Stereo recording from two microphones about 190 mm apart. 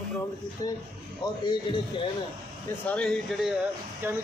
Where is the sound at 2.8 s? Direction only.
5° left (ahead or behind); by 4.2 s 10° right (ahead or behind).